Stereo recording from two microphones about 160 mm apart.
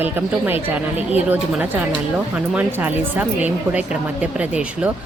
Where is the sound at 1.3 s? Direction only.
10° right (ahead or behind).